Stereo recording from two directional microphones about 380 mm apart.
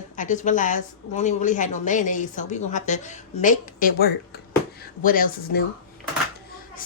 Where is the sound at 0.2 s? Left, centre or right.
Centre.